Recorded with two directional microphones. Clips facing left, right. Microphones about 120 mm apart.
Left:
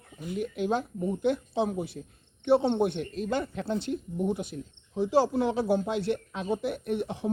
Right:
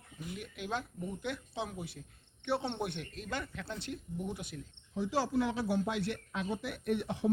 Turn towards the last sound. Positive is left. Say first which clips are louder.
# left 3 dB
turn(degrees=25)  # may be behind; listen again after turning